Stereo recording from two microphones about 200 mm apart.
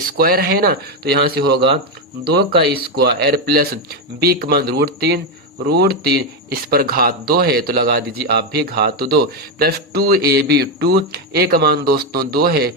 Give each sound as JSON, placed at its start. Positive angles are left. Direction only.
{"t": 0.2, "sound": "a man's voice", "side_deg": -50}